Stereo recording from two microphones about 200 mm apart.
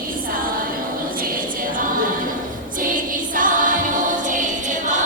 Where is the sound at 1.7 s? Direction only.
45° right (ahead or behind).